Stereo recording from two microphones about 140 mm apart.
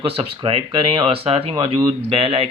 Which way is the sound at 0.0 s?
40° right (ahead or behind).